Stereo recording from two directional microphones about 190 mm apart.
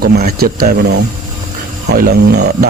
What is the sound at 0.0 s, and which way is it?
Speech, 55° right (ahead or behind).